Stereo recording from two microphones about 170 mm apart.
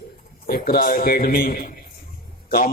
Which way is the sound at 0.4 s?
60° left (ahead or behind).